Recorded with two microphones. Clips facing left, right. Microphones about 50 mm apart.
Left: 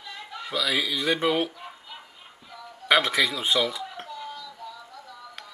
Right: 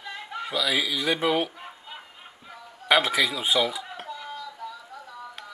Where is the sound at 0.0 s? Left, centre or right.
Right.